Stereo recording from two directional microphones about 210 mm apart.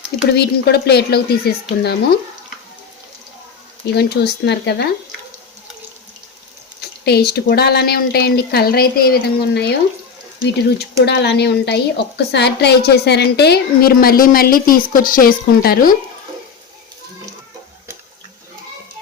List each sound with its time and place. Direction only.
0.3 s a woman's voice: 50° left (ahead or behind)
3.9 s a woman's voice: 50° left (ahead or behind)
6.8 s a woman's voice: 50° left (ahead or behind)
10.8 s a woman's voice: 50° left (ahead or behind)